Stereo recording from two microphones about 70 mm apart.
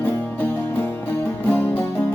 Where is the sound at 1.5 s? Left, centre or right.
Left.